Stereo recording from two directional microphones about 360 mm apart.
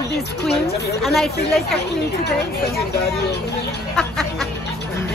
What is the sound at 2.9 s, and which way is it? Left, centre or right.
Speech, left.